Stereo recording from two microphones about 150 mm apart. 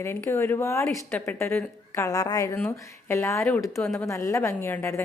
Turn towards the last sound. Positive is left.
turn(degrees=15)  # may be behind; listen again after turning